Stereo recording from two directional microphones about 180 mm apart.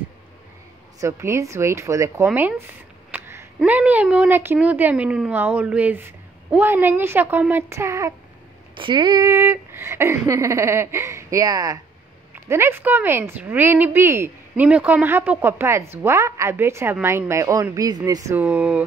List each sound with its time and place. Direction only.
1.0 s speech: 15° right (ahead or behind)
8.7 s speech: 25° right (ahead or behind); by 18.9 s 10° right (ahead or behind)